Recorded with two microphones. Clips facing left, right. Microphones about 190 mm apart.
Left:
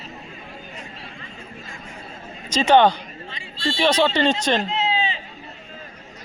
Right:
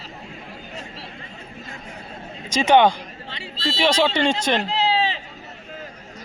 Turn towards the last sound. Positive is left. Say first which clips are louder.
# right 2 dB
turn(degrees=-70)  # may be behind; listen again after turning